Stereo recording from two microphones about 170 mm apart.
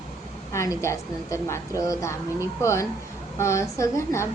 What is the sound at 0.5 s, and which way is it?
A woman's voice, 20° left (ahead or behind).